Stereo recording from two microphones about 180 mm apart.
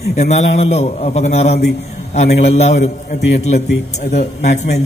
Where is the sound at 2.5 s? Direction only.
35° left (ahead or behind).